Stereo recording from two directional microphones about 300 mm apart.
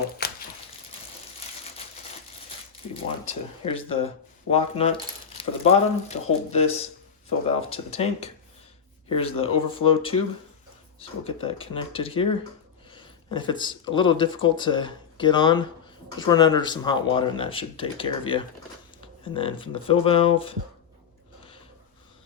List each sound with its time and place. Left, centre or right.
0.2 s a sound: left
3.2 s speech: centre
7.7 s speech: centre